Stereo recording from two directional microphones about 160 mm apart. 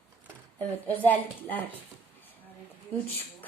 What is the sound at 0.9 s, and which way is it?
Music, 10° left (ahead or behind).